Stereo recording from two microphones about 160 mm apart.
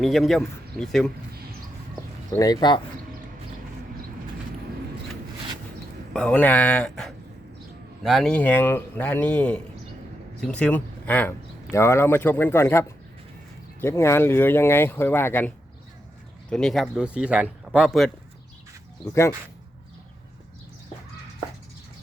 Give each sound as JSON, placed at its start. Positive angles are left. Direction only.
{"t": 0.0, "sound": "a man's voice", "side_deg": 0}
{"t": 2.4, "sound": "speech", "side_deg": 25}
{"t": 6.1, "sound": "speech", "side_deg": 10}
{"t": 13.8, "sound": "a man's voice", "side_deg": 15}